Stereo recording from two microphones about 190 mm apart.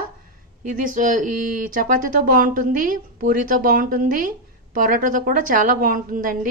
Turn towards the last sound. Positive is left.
turn(degrees=-45)  # may be behind; listen again after turning